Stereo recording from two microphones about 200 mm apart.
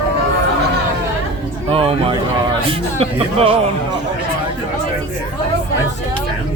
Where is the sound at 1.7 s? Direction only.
30° right (ahead or behind).